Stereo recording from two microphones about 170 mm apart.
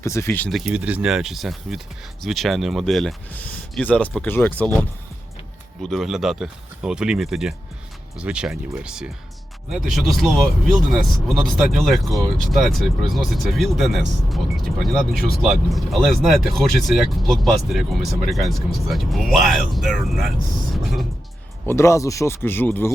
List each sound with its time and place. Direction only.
0.0 s speech: 15° left (ahead or behind)
0.5 s speech: 5° right (ahead or behind); by 4.6 s 10° left (ahead or behind)
5.8 s speech: centre (ahead or behind)
21.7 s speech: 15° left (ahead or behind)